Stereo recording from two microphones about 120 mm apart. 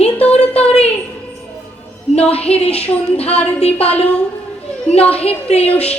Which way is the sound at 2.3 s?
55° left (ahead or behind).